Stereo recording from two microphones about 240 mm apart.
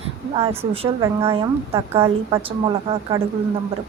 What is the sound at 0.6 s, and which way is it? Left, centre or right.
Speech, right.